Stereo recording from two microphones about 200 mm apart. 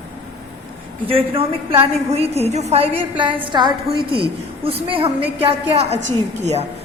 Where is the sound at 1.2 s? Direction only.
25° right (ahead or behind).